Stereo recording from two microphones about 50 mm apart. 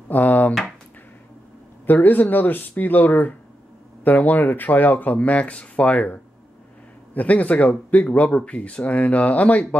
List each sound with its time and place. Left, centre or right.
0.1 s a sound: left
1.9 s speech: left
7.2 s speech: left